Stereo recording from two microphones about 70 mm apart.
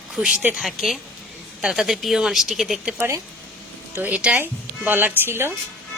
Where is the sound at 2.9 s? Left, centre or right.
Right.